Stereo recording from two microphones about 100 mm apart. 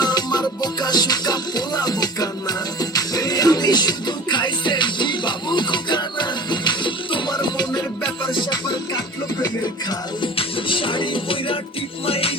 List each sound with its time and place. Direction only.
0.0 s music: 45° left (ahead or behind)
10.2 s music: 60° left (ahead or behind)
12.0 s music: 70° left (ahead or behind)